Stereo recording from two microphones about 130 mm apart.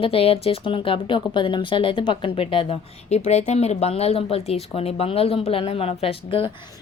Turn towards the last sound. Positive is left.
turn(degrees=45)  # may be behind; listen again after turning